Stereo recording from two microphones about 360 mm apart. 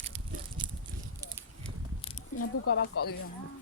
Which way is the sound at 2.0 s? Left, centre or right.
Centre.